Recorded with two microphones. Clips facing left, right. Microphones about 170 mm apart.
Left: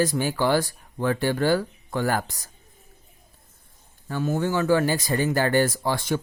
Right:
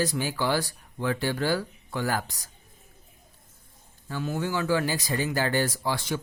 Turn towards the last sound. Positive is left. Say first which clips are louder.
# left 4 dB
turn(degrees=50)  # may be behind; listen again after turning